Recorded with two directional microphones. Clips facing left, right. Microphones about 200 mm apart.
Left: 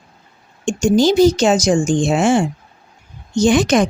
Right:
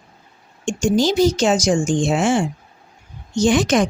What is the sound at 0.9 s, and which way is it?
Speech, 55° left (ahead or behind).